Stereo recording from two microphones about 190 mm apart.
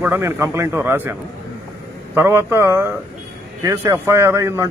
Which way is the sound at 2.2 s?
15° right (ahead or behind).